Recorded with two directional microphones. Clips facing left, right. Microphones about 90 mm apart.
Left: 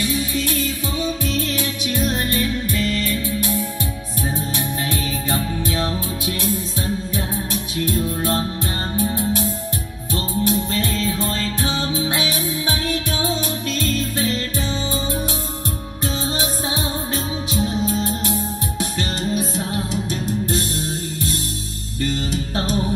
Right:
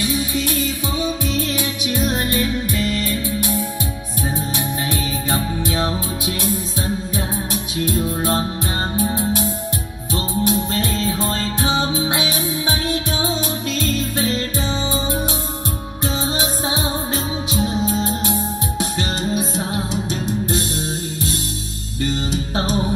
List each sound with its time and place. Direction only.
0.0 s music: 15° right (ahead or behind)
5.3 s music: 15° right (ahead or behind)
8.2 s music: 20° right (ahead or behind)
16.3 s music: 20° right (ahead or behind)
22.6 s music: 20° right (ahead or behind)